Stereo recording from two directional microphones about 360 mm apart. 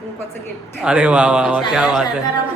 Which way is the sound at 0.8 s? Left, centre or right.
Centre.